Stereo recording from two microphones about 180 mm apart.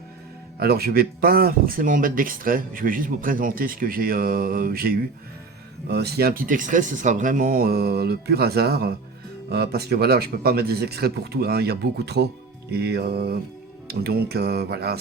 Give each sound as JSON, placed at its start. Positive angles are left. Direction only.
{"t": 0.6, "sound": "speech", "side_deg": -60}